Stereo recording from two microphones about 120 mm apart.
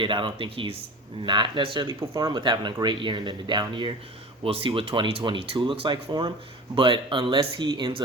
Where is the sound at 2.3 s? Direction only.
40° right (ahead or behind).